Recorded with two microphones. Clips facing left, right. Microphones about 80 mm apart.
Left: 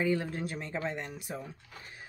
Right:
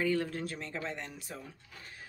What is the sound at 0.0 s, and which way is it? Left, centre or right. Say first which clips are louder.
Speech: left 1 dB; centre.